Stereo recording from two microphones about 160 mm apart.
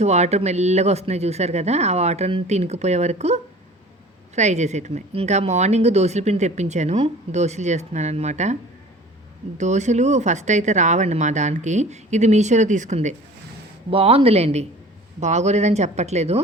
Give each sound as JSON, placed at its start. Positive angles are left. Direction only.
{"t": 0.0, "sound": "speech", "side_deg": -45}
{"t": 9.6, "sound": "speech", "side_deg": -45}
{"t": 13.9, "sound": "speech", "side_deg": -35}